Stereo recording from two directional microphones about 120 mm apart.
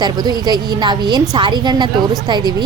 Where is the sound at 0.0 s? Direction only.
35° right (ahead or behind).